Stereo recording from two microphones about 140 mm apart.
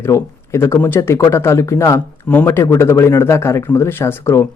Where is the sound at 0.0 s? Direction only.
20° left (ahead or behind).